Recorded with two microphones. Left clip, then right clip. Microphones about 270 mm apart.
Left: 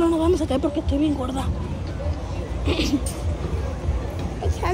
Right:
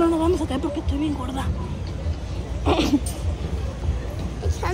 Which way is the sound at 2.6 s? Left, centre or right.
Centre.